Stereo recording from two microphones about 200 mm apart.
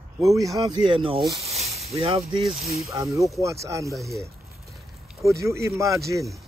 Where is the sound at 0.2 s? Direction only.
15° right (ahead or behind).